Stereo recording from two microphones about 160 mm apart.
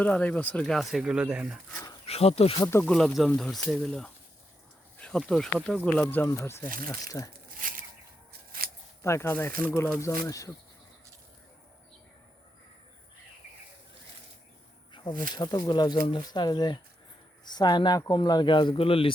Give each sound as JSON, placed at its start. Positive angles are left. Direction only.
{"t": 0.0, "sound": "speech", "side_deg": 10}
{"t": 1.7, "sound": "speech", "side_deg": 20}
{"t": 2.0, "sound": "speech", "side_deg": 40}
{"t": 2.6, "sound": "speech", "side_deg": 15}
{"t": 8.3, "sound": "scissors", "side_deg": -70}
{"t": 9.0, "sound": "speech", "side_deg": 15}
{"t": 14.9, "sound": "snake", "side_deg": 30}
{"t": 15.3, "sound": "speech", "side_deg": 25}